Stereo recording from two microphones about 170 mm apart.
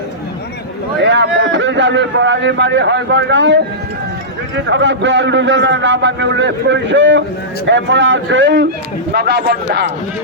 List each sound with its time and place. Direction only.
0.9 s a man's voice: 90° right